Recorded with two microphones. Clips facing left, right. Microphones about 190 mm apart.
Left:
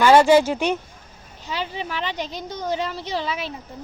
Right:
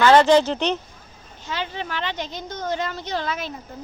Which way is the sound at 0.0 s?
10° left (ahead or behind).